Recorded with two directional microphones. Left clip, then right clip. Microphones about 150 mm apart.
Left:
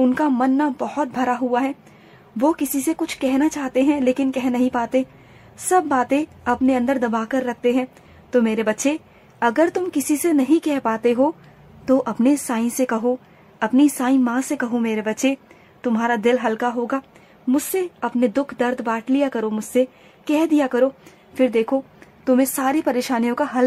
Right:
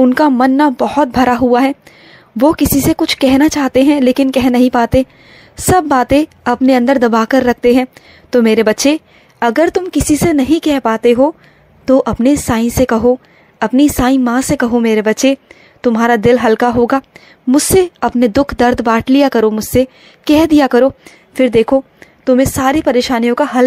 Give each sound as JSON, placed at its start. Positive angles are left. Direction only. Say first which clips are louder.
{"t": 0.4, "sound": "a woman's voice", "louder": "right 9 dB", "side_deg": -40}